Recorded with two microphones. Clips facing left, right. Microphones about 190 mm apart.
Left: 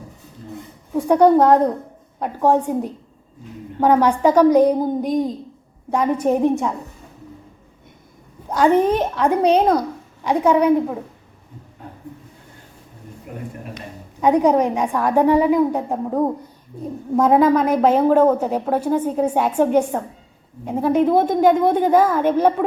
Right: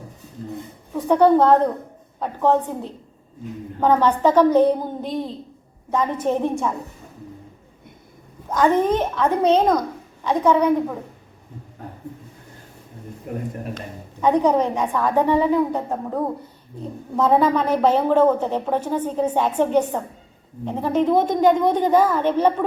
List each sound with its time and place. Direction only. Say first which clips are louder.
0.9 s a woman's voice: left 2 dB; 10° left (ahead or behind)
8.4 s a woman's voice: left 2 dB; 15° left (ahead or behind)
13.3 s speech: right 5 dB; 40° right (ahead or behind)
14.2 s a woman's voice: left 2 dB; 10° left (ahead or behind)